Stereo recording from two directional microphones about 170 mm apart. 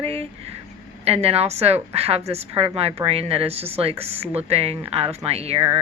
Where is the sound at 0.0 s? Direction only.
35° right (ahead or behind).